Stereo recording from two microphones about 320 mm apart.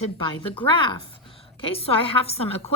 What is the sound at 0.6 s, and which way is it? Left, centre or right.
Speech, centre.